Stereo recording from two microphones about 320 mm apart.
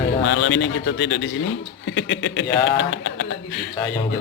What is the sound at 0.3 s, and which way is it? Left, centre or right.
A man's voice, left.